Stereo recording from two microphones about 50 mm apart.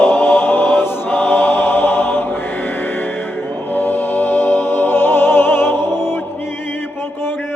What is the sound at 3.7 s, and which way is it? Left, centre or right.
Music, left.